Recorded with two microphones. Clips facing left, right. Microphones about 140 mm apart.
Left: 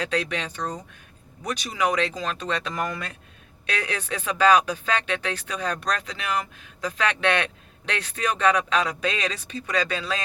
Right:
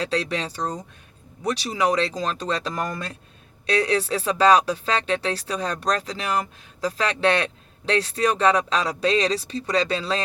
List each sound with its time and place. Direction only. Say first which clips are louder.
0.0 s speech: right 2 dB; 30° right (ahead or behind)